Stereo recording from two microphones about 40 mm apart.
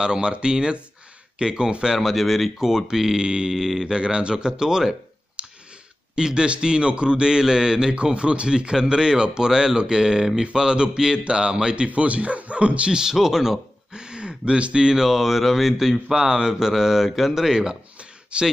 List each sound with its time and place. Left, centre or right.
0.0 s speech: right
2.0 s speech: centre; by 3.5 s right
3.5 s speech: centre
3.8 s speech: centre
6.1 s speech: centre
7.9 s speech: right
13.1 s speech: centre
15.0 s speech: centre; by 18.5 s right